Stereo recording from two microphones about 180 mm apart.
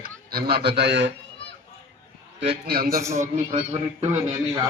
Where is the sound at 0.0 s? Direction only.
55° right (ahead or behind).